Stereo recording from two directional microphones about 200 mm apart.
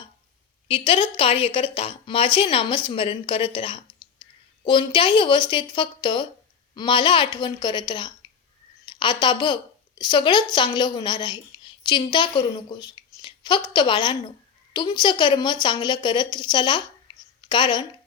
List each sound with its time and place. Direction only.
0.7 s a woman's voice: 25° left (ahead or behind)
8.9 s a sound: 25° left (ahead or behind)
9.2 s a woman's voice: 25° left (ahead or behind)